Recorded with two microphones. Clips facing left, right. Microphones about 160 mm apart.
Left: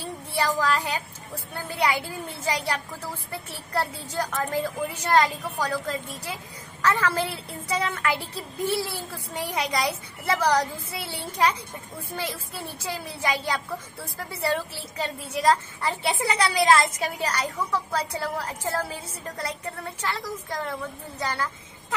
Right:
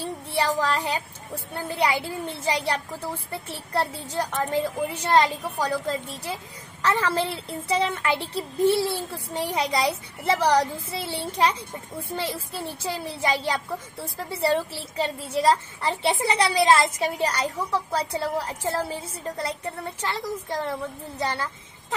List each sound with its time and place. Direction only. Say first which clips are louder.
0.4 s a woman's voice: even; 25° right (ahead or behind)
12.8 s a woman's voice: right 2 dB; 25° right (ahead or behind)